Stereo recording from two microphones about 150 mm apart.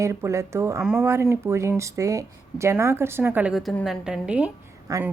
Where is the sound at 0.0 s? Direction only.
20° right (ahead or behind).